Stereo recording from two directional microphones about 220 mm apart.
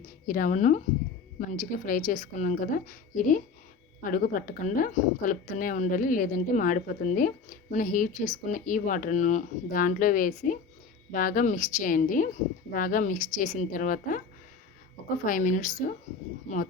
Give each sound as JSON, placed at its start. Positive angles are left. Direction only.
{"t": 0.3, "sound": "speech", "side_deg": 35}
{"t": 15.3, "sound": "speech", "side_deg": 35}